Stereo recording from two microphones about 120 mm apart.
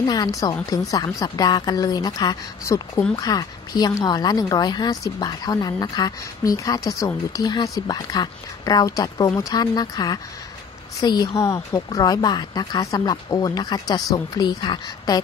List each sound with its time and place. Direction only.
0.0 s speech: 35° left (ahead or behind)